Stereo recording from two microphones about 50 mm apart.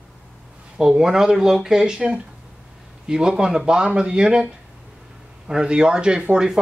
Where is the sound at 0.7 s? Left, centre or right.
Centre.